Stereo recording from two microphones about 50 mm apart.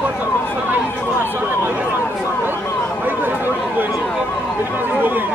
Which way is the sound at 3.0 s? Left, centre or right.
Right.